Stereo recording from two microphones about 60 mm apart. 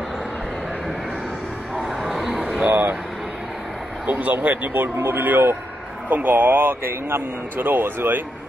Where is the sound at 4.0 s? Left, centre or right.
Right.